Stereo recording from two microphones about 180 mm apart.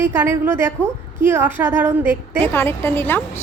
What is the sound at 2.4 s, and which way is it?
Speech, 10° left (ahead or behind).